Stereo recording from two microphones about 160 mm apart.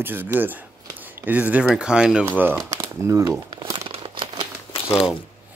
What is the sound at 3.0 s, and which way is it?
Crumpling, 20° right (ahead or behind).